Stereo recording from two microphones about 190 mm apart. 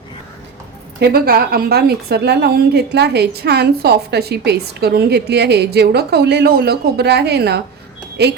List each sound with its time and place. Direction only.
0.9 s a woman's voice: 55° right (ahead or behind)